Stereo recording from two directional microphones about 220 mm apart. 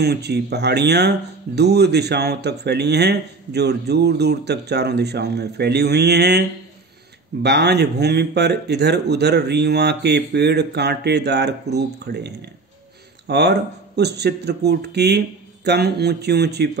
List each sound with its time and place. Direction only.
0.0 s speech: 50° right (ahead or behind)
7.4 s speech: 50° right (ahead or behind)